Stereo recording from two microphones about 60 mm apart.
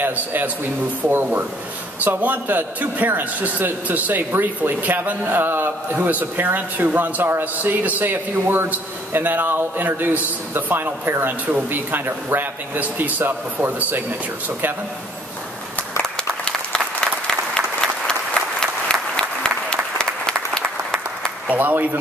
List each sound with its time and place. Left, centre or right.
0.0 s speech: right
2.0 s a man's voice: right
16.0 s applause: centre
21.5 s speech: right